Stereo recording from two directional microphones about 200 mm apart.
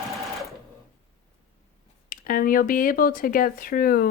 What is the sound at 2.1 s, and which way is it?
Speech, 45° left (ahead or behind).